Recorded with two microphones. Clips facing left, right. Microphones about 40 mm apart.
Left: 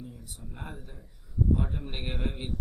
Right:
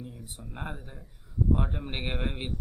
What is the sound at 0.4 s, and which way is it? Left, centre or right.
Speech, right.